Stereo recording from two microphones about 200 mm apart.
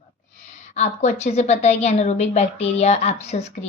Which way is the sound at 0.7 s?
35° left (ahead or behind).